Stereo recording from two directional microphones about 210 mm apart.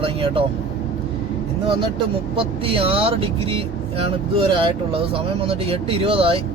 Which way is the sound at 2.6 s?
25° right (ahead or behind).